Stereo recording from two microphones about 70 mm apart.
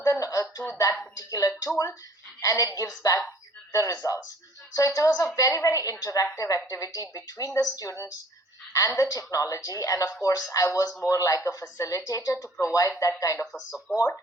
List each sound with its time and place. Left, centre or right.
0.0 s a sound: left
0.8 s a woman's voice: left
13.6 s speech: centre